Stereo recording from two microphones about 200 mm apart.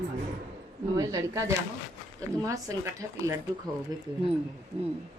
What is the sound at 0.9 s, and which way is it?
Speech, 15° right (ahead or behind).